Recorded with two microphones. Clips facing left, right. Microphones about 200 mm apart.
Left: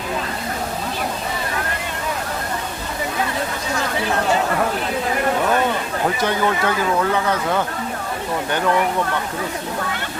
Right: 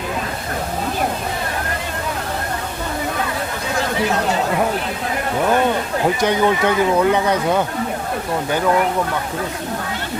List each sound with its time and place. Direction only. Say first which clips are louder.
6.2 s speech: right 4 dB; 20° right (ahead or behind)